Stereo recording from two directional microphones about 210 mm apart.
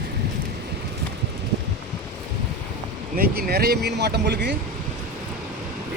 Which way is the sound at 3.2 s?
45° right (ahead or behind).